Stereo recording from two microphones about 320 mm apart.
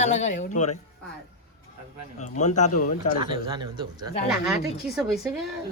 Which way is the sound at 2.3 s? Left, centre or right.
Left.